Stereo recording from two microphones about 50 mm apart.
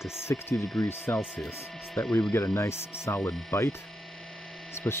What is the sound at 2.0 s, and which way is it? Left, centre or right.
Speech, left.